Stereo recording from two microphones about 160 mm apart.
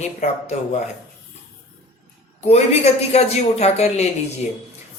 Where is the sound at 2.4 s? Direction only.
40° left (ahead or behind).